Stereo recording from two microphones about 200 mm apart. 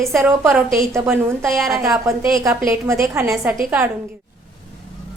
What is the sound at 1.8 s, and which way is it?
Speech, 15° right (ahead or behind).